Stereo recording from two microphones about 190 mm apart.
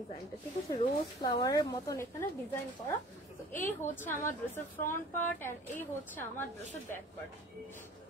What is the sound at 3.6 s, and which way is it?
Speech, 10° left (ahead or behind).